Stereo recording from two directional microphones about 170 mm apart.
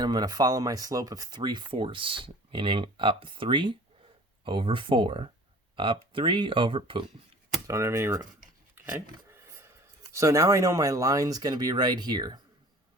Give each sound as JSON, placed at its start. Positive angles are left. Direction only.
{"t": 0.0, "sound": "speech", "side_deg": -25}
{"t": 7.7, "sound": "speech", "side_deg": -15}